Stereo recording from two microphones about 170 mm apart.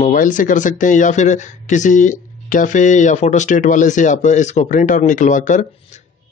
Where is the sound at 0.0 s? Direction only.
50° left (ahead or behind).